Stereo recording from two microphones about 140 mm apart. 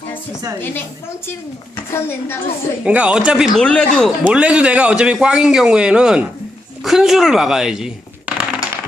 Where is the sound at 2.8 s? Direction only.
10° right (ahead or behind).